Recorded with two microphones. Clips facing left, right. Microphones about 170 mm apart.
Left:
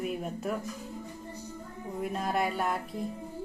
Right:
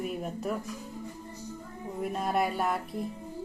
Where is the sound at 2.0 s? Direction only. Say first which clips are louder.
Right 1 dB; centre (ahead or behind).